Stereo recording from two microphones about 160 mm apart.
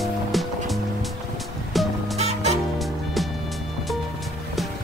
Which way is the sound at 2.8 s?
Centre (ahead or behind).